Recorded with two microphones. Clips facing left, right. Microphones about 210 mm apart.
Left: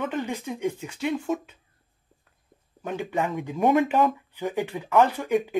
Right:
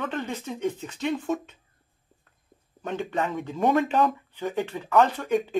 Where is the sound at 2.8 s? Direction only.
5° left (ahead or behind).